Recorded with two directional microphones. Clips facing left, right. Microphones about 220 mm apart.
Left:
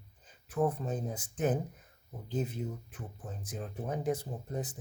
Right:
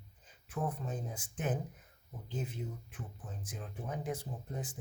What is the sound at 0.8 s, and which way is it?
Speech, 40° left (ahead or behind).